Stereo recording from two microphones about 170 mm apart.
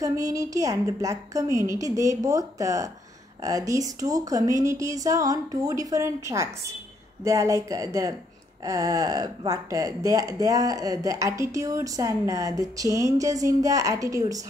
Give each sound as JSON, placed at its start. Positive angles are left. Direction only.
{"t": 0.0, "sound": "speech", "side_deg": -20}